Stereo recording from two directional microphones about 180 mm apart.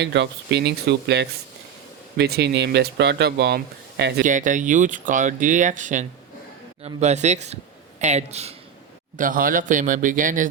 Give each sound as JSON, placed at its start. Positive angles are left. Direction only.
{"t": 0.0, "sound": "speech", "side_deg": -75}
{"t": 4.2, "sound": "speech", "side_deg": -45}
{"t": 9.1, "sound": "speech", "side_deg": -50}